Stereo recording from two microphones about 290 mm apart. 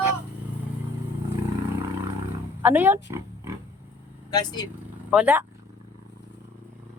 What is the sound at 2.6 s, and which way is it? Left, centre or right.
Speech, centre.